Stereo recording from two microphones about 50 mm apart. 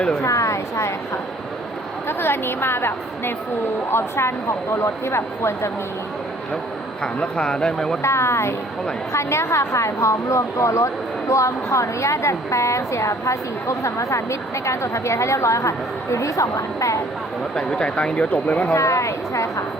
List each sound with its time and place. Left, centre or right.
0.2 s speech: left
2.0 s a woman's voice: left
7.0 s speech: left
8.0 s a woman's voice: left
17.5 s speech: centre
18.7 s a woman's voice: left